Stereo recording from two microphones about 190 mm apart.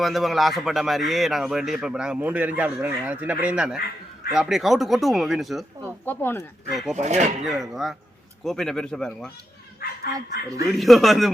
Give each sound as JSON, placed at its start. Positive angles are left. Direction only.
{"t": 0.0, "sound": "a man's voice", "side_deg": 0}
{"t": 5.8, "sound": "speech", "side_deg": 10}
{"t": 6.7, "sound": "a man's voice", "side_deg": 0}
{"t": 6.9, "sound": "speech", "side_deg": -35}
{"t": 7.4, "sound": "a man's voice", "side_deg": 0}
{"t": 10.1, "sound": "speech", "side_deg": -20}
{"t": 10.7, "sound": "a man's voice", "side_deg": 0}